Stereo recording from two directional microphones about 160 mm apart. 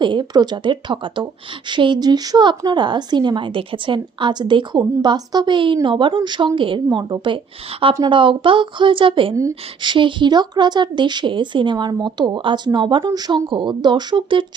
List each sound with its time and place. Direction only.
0.0 s a woman's voice: 30° right (ahead or behind)
9.3 s a woman's voice: 20° right (ahead or behind)